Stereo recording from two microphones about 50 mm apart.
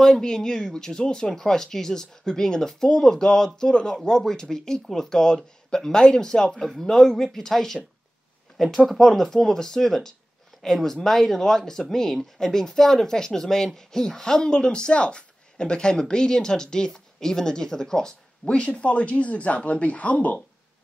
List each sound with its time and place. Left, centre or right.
0.0 s speech: centre; by 20.3 s left